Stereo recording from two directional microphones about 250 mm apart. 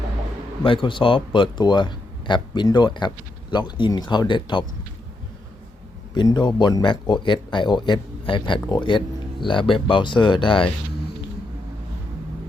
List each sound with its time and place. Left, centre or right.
0.6 s speech: centre
6.1 s speech: centre